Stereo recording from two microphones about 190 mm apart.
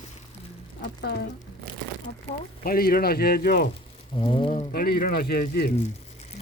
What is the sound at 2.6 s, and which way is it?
Speech, 50° left (ahead or behind).